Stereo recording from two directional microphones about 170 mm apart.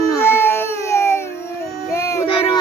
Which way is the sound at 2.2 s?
30° left (ahead or behind).